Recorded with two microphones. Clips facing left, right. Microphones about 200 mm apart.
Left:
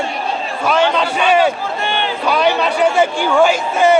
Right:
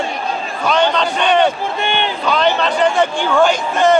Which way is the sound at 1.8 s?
20° right (ahead or behind).